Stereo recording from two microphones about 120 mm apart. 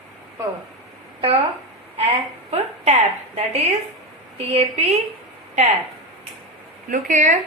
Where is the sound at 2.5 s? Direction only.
60° right (ahead or behind).